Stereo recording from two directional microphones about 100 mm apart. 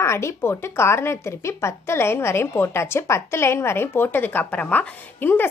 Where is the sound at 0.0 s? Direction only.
25° left (ahead or behind).